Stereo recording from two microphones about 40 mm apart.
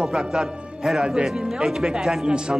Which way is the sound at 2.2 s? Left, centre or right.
Right.